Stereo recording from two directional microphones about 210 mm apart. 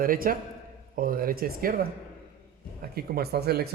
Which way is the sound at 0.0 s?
40° right (ahead or behind).